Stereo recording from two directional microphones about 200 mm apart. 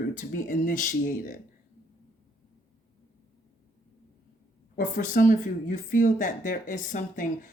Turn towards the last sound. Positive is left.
turn(degrees=40)  # may be behind; listen again after turning